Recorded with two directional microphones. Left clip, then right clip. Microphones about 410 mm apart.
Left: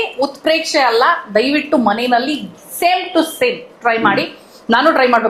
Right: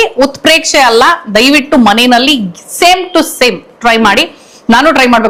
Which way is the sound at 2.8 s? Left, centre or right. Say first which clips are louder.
Right 7 dB; right.